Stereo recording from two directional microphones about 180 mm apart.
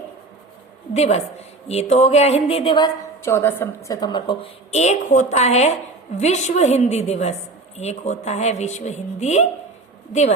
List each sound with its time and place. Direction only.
0.9 s a woman's voice: 35° left (ahead or behind)
3.2 s a woman's voice: 15° left (ahead or behind)
4.7 s a woman's voice: 40° left (ahead or behind)